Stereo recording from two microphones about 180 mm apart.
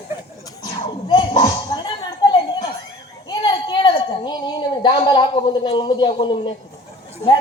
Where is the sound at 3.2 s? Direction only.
25° left (ahead or behind).